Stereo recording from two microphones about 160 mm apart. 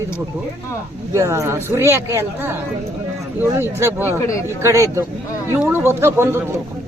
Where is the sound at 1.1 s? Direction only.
20° right (ahead or behind).